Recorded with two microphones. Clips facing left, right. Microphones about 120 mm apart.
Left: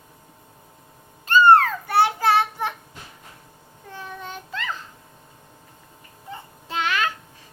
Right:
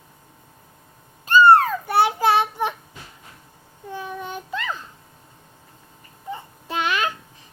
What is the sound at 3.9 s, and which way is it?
Child singing, 15° right (ahead or behind).